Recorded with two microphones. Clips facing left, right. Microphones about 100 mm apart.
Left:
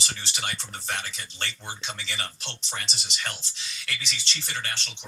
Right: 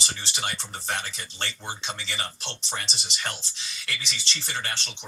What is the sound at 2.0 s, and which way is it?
Speech, 30° right (ahead or behind).